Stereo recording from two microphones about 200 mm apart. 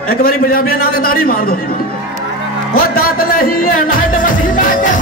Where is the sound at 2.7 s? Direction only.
45° left (ahead or behind).